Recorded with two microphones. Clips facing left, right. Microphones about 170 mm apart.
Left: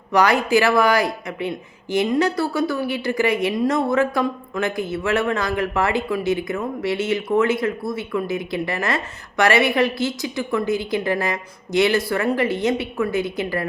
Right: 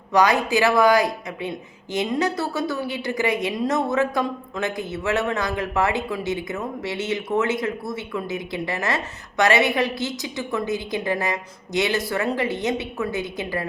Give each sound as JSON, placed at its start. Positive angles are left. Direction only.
{"t": 0.1, "sound": "speech", "side_deg": -20}